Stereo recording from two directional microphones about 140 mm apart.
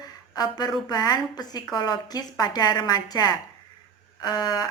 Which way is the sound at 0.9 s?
30° left (ahead or behind).